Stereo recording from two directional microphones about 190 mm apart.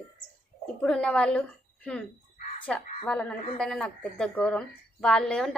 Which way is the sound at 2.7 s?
5° left (ahead or behind).